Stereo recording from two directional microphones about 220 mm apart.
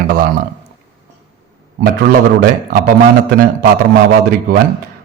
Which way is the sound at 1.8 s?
45° right (ahead or behind).